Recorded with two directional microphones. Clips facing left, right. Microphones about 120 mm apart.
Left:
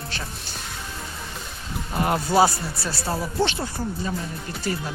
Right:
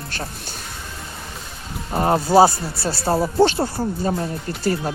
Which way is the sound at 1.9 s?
35° right (ahead or behind).